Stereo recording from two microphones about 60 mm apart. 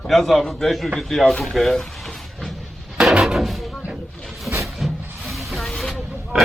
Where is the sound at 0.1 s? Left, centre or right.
Centre.